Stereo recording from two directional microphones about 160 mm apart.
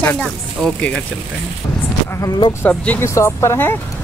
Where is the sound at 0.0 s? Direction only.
10° left (ahead or behind).